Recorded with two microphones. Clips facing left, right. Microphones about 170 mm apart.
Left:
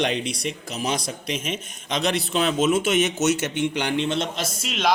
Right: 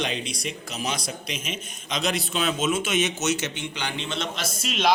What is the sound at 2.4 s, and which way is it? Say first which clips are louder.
Speech: left 5 dB; 55° left (ahead or behind).